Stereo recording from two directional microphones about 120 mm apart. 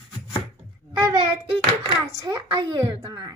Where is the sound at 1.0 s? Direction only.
35° right (ahead or behind).